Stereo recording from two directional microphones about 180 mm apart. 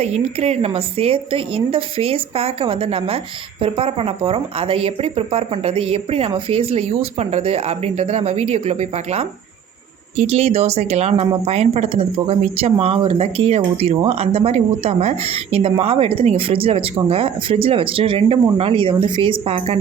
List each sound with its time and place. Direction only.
0.0 s speech: 35° right (ahead or behind)